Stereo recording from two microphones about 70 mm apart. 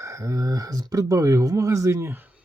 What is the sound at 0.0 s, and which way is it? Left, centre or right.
Speech, right.